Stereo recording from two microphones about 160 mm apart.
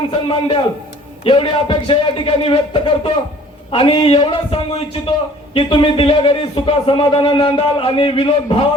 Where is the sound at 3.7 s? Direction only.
30° left (ahead or behind).